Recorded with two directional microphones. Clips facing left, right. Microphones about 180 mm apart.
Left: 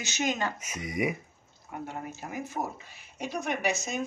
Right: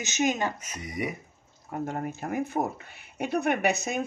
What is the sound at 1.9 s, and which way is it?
Speech, 55° right (ahead or behind).